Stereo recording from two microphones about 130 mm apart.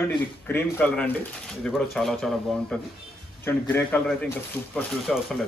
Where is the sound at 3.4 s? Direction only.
15° left (ahead or behind).